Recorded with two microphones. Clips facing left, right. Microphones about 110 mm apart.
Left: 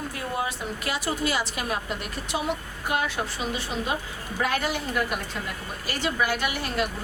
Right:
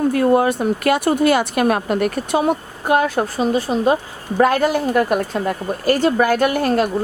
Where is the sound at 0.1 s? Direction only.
60° right (ahead or behind).